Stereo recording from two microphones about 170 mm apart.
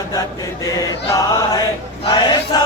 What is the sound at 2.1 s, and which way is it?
Choir, 25° left (ahead or behind).